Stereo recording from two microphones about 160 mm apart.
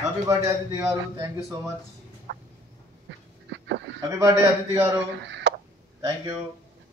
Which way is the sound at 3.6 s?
90° right.